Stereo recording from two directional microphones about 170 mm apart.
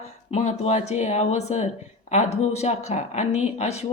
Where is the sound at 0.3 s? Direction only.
40° left (ahead or behind).